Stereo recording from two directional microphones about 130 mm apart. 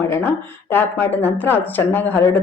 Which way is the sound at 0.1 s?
15° left (ahead or behind).